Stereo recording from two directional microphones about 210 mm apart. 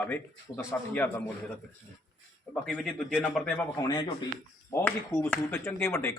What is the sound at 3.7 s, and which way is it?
Speech, 20° left (ahead or behind).